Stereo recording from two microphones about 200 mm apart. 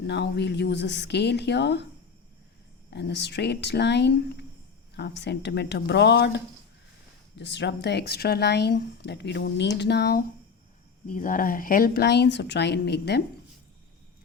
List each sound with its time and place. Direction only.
0.1 s speech: 60° left (ahead or behind)
2.9 s speech: 60° left (ahead or behind)
11.1 s speech: 40° left (ahead or behind)